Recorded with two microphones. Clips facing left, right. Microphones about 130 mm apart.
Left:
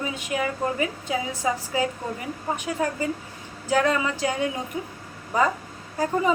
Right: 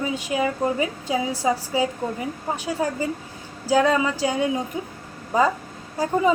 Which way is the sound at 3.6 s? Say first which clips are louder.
Right 3 dB; 30° right (ahead or behind).